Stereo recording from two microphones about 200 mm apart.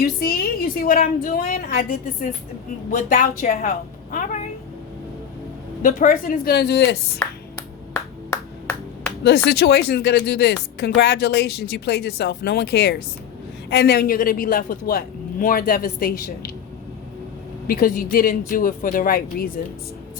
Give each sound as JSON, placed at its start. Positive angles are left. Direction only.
{"t": 0.2, "sound": "a man's voice", "side_deg": 50}
{"t": 5.8, "sound": "a man's voice", "side_deg": 40}
{"t": 8.3, "sound": "clapping", "side_deg": 5}
{"t": 9.2, "sound": "a man's voice", "side_deg": 55}
{"t": 17.7, "sound": "a man's voice", "side_deg": 45}